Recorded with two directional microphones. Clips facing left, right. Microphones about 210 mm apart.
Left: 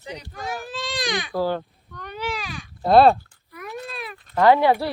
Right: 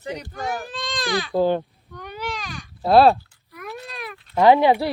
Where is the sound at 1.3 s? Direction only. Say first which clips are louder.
Right 5 dB; 20° right (ahead or behind).